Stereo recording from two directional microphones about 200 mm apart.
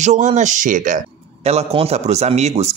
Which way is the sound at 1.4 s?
30° right (ahead or behind).